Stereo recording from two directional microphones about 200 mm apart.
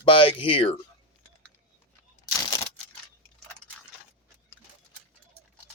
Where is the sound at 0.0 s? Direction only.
25° left (ahead or behind).